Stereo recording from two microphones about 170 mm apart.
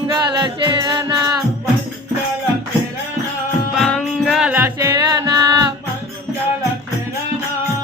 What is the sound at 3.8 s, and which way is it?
Music, 5° left (ahead or behind).